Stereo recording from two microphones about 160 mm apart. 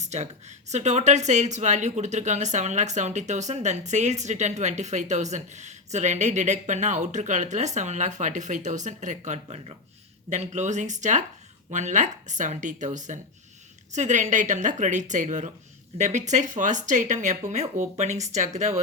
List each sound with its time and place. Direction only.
0.0 s speech: 45° right (ahead or behind)